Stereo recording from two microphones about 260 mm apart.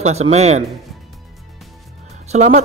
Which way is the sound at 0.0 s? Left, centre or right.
Right.